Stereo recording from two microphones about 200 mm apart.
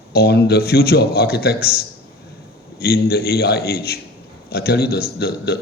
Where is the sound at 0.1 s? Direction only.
55° left (ahead or behind).